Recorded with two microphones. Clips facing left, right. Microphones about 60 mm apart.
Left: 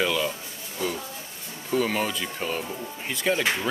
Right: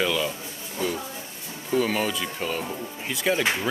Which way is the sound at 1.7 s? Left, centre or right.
Centre.